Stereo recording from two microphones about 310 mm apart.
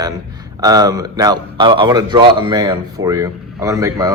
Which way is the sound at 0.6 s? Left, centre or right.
Centre.